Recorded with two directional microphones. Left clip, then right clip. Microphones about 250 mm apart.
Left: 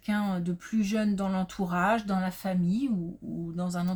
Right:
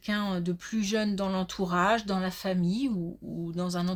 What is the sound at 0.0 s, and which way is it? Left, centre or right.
Speech, right.